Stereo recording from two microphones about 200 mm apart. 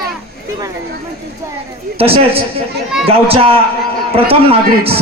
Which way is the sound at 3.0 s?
30° right (ahead or behind).